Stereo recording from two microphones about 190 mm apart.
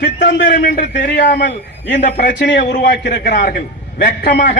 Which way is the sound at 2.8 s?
55° left (ahead or behind).